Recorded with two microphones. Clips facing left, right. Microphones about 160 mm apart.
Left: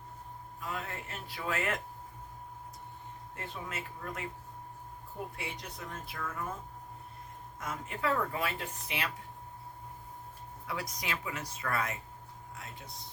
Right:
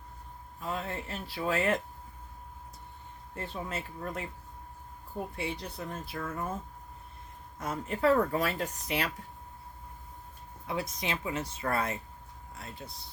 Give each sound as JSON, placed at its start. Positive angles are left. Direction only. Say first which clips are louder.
{"t": 0.6, "sound": "speech", "louder": "right 4 dB", "side_deg": -30}
{"t": 3.3, "sound": "speech", "louder": "right 5 dB", "side_deg": -30}
{"t": 5.4, "sound": "speech", "louder": "right 6 dB", "side_deg": -30}
{"t": 7.6, "sound": "speech", "louder": "right 7 dB", "side_deg": -35}
{"t": 10.7, "sound": "speech", "louder": "right 4 dB", "side_deg": -25}
{"t": 12.5, "sound": "a sound", "louder": "right 4 dB", "side_deg": -35}